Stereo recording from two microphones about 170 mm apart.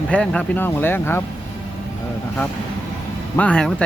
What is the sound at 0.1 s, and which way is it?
Speech, 5° left (ahead or behind).